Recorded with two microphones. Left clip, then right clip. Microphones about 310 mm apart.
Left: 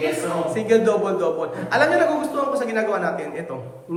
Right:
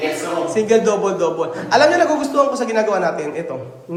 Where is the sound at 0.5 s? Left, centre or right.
Centre.